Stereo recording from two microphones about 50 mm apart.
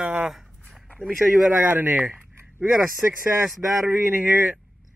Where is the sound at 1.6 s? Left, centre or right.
Right.